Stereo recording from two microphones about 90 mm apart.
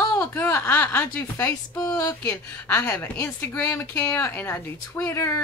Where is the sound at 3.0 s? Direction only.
25° left (ahead or behind).